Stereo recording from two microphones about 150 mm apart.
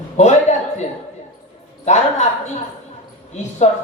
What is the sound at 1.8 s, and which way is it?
Speech, 50° left (ahead or behind).